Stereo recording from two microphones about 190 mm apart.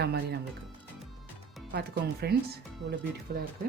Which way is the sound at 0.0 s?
60° right (ahead or behind).